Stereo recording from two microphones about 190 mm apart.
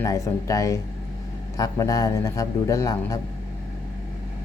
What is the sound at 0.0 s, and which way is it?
A man's voice, 20° left (ahead or behind).